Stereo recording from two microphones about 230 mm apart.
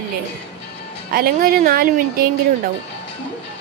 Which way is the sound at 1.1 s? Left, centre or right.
Right.